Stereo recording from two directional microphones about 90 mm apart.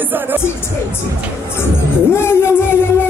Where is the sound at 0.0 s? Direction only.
20° right (ahead or behind).